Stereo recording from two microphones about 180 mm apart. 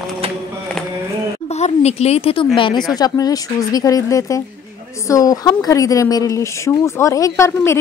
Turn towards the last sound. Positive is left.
turn(degrees=15)  # may be behind; listen again after turning